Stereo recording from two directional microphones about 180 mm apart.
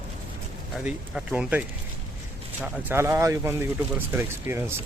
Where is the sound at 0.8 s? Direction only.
5° right (ahead or behind).